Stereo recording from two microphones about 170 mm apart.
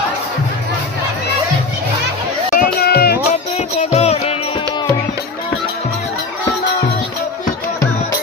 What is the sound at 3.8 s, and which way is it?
Music, 40° left (ahead or behind).